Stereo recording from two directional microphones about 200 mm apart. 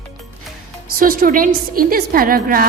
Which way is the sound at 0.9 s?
45° right (ahead or behind).